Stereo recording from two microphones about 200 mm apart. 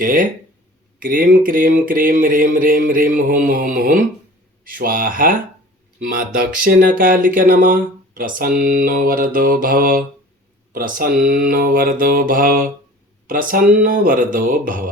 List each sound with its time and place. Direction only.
0.0 s speech: 45° right (ahead or behind)